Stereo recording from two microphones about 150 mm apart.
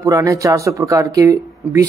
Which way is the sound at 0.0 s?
20° right (ahead or behind).